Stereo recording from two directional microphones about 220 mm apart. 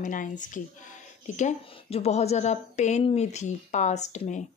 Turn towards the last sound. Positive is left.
turn(degrees=30)  # may be behind; listen again after turning